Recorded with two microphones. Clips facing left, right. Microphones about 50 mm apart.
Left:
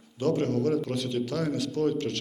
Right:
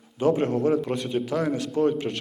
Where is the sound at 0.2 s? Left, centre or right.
Centre.